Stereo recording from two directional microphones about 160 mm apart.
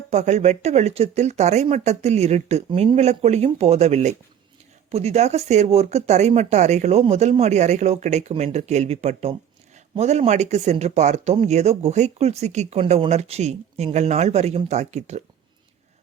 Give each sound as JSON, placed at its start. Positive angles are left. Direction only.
{"t": 0.1, "sound": "speech", "side_deg": -45}